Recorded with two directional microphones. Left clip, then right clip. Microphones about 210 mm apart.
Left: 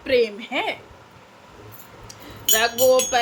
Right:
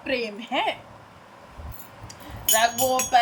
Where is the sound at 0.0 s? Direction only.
15° left (ahead or behind).